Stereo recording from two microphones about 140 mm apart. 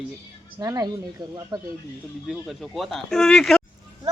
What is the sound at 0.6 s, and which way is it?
A child's voice, 25° right (ahead or behind).